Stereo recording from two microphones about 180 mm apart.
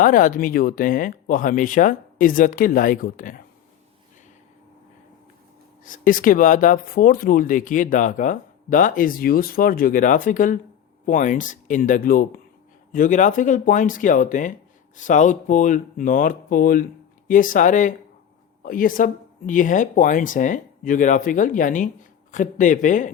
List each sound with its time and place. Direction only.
0.0 s speech: 50° left (ahead or behind)
5.8 s speech: 50° left (ahead or behind)